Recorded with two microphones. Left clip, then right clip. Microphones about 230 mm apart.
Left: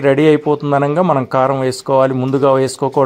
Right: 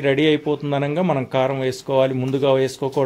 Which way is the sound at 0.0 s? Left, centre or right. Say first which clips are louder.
Left 6 dB; left.